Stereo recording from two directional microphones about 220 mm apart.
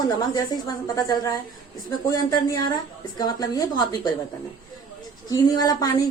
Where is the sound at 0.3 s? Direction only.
15° left (ahead or behind).